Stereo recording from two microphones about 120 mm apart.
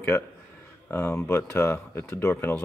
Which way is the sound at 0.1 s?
30° left (ahead or behind).